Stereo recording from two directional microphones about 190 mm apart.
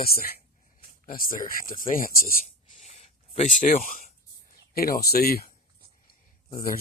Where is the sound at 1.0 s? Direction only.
50° left (ahead or behind).